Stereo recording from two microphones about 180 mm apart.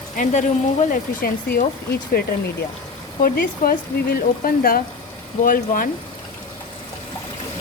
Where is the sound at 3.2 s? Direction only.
55° left (ahead or behind).